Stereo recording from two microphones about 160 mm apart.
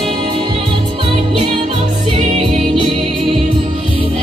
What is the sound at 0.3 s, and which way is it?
Music, 30° right (ahead or behind).